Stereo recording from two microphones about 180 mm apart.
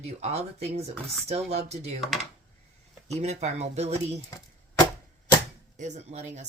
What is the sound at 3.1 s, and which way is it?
Speech, 40° right (ahead or behind).